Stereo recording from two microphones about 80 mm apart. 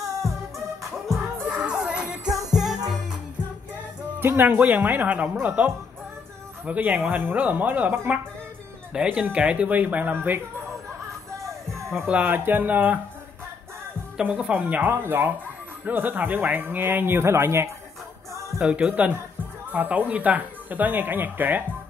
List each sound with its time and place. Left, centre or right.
0.0 s music: right
1.5 s music: centre
4.2 s speech: right
8.9 s speech: centre
12.1 s speech: right
14.2 s speech: centre; by 17.6 s right
18.6 s speech: centre